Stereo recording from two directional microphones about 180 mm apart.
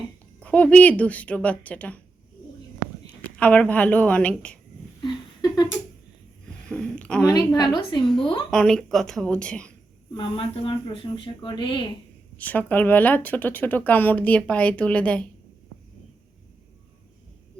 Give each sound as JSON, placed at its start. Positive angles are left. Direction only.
{"t": 0.3, "sound": "speech", "side_deg": 5}
{"t": 3.3, "sound": "speech", "side_deg": 5}
{"t": 4.9, "sound": "a sound", "side_deg": 20}
{"t": 6.7, "sound": "a sound", "side_deg": 5}
{"t": 7.3, "sound": "speech", "side_deg": 20}
{"t": 8.4, "sound": "a woman's voice", "side_deg": 5}
{"t": 10.2, "sound": "speech", "side_deg": 30}
{"t": 12.4, "sound": "speech", "side_deg": 10}